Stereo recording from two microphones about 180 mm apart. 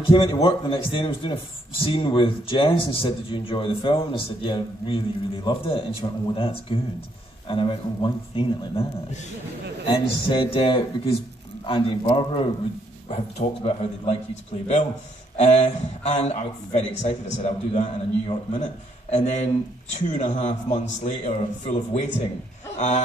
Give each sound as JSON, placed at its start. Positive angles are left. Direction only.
{"t": 0.0, "sound": "a man's voice", "side_deg": 30}